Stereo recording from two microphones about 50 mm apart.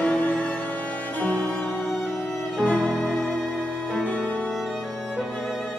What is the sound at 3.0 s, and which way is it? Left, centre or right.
Music, centre.